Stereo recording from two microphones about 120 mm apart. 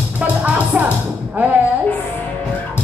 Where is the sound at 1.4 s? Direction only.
15° right (ahead or behind).